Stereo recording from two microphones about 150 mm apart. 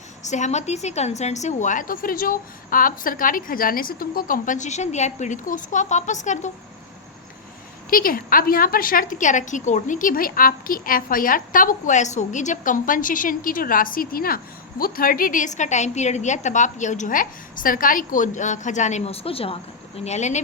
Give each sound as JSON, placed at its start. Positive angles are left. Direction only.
{"t": 0.2, "sound": "a woman's voice", "side_deg": 50}
{"t": 7.9, "sound": "a woman's voice", "side_deg": 70}
{"t": 20.1, "sound": "speech", "side_deg": 50}